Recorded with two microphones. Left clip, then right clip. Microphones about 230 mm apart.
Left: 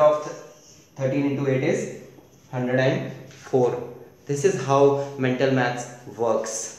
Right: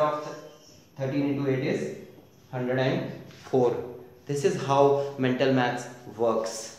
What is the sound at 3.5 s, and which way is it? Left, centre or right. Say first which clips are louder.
Speech: left 3 dB; centre.